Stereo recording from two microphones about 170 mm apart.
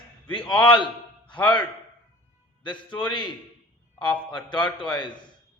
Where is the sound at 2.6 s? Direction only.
25° left (ahead or behind).